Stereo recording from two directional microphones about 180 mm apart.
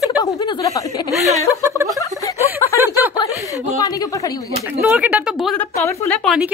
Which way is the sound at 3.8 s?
20° left (ahead or behind).